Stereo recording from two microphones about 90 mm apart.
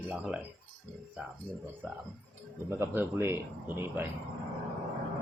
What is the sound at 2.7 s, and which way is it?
Speech, 25° right (ahead or behind).